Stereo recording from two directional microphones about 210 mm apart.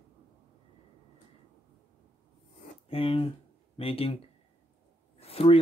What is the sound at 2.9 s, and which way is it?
Speech, 25° left (ahead or behind).